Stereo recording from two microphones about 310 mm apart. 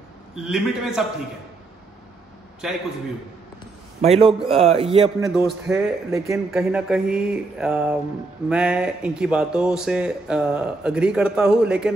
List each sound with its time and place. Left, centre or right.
0.4 s speech: centre
4.0 s speech: centre
5.0 s speech: centre